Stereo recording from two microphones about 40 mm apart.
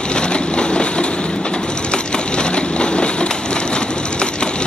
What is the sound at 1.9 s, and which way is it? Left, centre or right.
Wood, left.